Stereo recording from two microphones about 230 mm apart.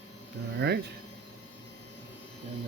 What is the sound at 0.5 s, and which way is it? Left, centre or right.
Speech, right.